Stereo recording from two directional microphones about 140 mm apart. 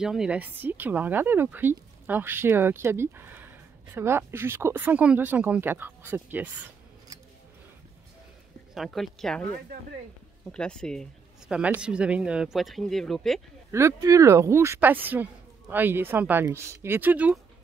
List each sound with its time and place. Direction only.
0.0 s a woman's voice: 5° right (ahead or behind)
8.7 s speech: centre (ahead or behind)
10.5 s speech: 5° left (ahead or behind)
11.5 s speech: 10° right (ahead or behind)
13.7 s a woman's voice: 20° right (ahead or behind)